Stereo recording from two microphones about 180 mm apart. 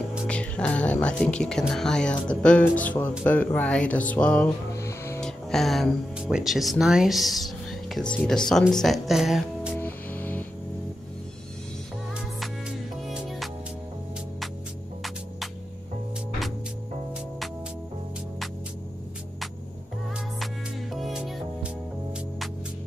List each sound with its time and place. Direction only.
0.3 s speech: 5° left (ahead or behind)
4.7 s music: 15° left (ahead or behind)
5.2 s speech: centre (ahead or behind)
9.8 s music: 10° left (ahead or behind)
12.4 s music: centre (ahead or behind)
20.9 s music: centre (ahead or behind)